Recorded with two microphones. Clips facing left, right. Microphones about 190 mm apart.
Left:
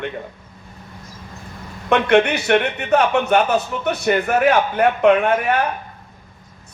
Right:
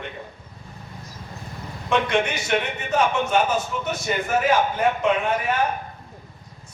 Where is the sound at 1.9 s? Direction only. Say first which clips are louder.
Left 7 dB; 60° left (ahead or behind).